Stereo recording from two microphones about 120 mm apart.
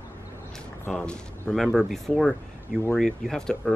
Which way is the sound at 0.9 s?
10° left (ahead or behind).